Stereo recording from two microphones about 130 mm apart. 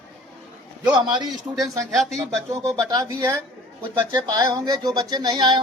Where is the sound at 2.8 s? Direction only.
30° right (ahead or behind).